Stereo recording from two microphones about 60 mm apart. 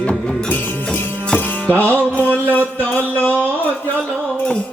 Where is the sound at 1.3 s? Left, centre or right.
Left.